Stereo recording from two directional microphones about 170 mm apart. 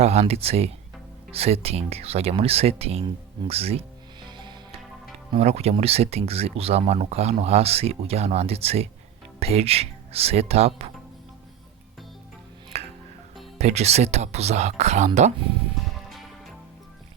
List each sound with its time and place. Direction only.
0.0 s speech: 40° right (ahead or behind)
4.3 s music: 25° right (ahead or behind)
5.3 s speech: 40° right (ahead or behind)
12.7 s music: 40° right (ahead or behind)
13.6 s speech: 40° right (ahead or behind)
15.8 s music: centre (ahead or behind)